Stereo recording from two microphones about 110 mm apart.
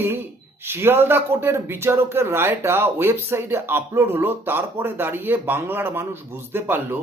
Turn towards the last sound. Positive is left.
turn(degrees=-20)  # may be behind; listen again after turning